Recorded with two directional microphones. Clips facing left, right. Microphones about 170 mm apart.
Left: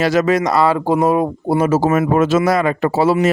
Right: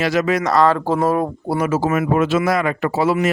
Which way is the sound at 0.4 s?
10° left (ahead or behind).